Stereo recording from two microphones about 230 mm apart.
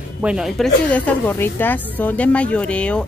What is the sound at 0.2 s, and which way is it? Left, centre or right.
A woman's voice, centre.